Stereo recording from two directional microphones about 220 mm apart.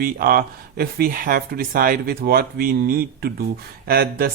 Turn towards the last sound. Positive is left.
turn(degrees=-45)  # may be behind; listen again after turning